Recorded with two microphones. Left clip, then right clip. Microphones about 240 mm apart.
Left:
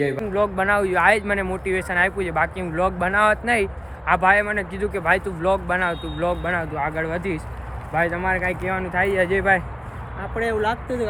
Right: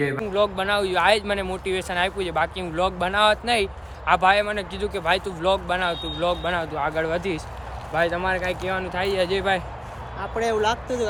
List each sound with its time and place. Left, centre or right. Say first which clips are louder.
0.3 s speech: left 2 dB; centre